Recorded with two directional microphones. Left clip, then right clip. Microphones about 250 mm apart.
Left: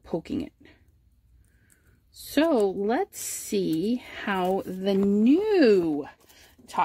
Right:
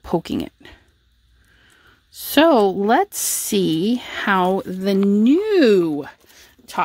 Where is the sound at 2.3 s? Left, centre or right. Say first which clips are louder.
Right 9 dB; right.